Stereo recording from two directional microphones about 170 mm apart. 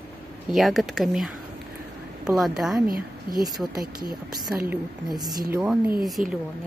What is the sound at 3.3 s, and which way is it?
Speech, 60° right (ahead or behind).